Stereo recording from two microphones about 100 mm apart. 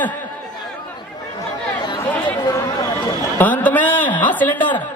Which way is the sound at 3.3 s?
15° left (ahead or behind).